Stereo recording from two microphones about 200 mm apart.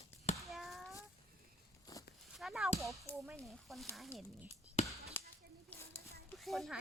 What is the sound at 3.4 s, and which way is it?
Speech, centre (ahead or behind).